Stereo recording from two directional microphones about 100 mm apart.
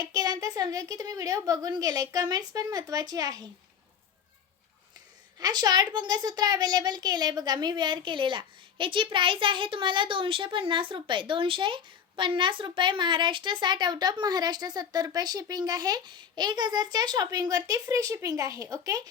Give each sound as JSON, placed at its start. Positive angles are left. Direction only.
{"t": 0.1, "sound": "a woman's voice", "side_deg": -40}
{"t": 5.4, "sound": "a child's voice", "side_deg": -45}